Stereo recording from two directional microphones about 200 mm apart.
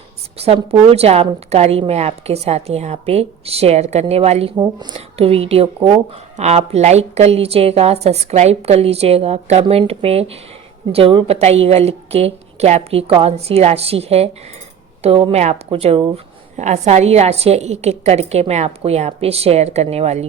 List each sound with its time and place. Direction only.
0.3 s a woman's voice: 30° right (ahead or behind)
4.5 s speech: 15° right (ahead or behind)
4.9 s a woman's voice: 30° right (ahead or behind)